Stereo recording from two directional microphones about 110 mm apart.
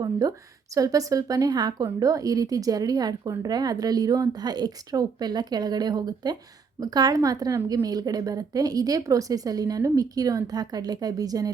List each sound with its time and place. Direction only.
0.0 s a woman's voice: 35° right (ahead or behind)